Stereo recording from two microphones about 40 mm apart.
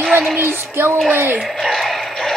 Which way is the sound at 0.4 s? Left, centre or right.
Right.